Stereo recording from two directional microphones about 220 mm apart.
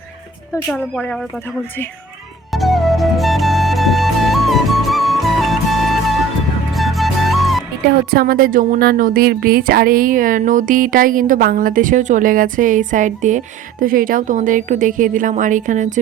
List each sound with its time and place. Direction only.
0.7 s speech: 5° left (ahead or behind)
2.5 s music: centre (ahead or behind)
8.1 s speech: 45° right (ahead or behind)